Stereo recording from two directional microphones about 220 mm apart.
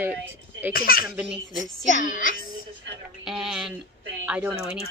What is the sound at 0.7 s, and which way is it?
A child's voice, 40° left (ahead or behind).